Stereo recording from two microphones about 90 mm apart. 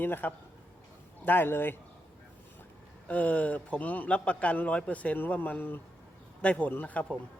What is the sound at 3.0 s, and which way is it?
A man's voice, 15° left (ahead or behind).